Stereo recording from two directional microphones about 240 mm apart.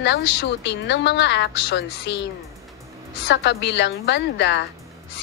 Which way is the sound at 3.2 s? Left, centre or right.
Left.